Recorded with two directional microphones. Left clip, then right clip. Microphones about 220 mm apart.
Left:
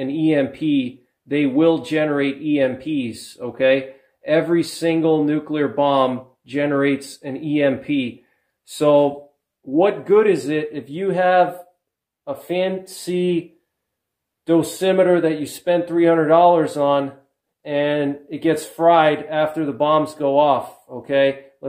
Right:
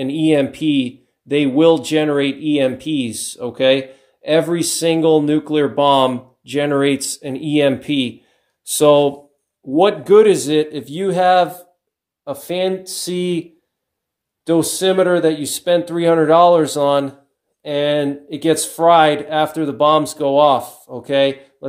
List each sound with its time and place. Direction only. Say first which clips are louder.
0.0 s speech: right 3 dB; 40° right (ahead or behind)